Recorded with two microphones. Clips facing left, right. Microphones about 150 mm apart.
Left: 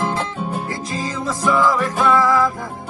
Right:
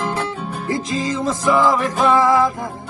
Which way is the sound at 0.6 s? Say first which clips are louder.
Right 4 dB; 20° right (ahead or behind).